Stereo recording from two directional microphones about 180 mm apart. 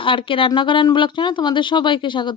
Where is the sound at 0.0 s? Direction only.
30° left (ahead or behind).